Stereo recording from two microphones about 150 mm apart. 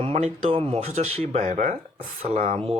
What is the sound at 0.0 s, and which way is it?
Speech, 40° right (ahead or behind).